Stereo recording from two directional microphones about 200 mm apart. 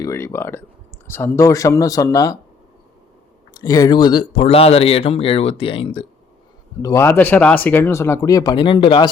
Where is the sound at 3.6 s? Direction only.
15° left (ahead or behind).